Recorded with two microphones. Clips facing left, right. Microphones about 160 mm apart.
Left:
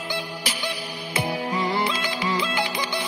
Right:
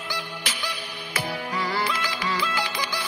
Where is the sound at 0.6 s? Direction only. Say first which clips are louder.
Left 4 dB; 30° left (ahead or behind).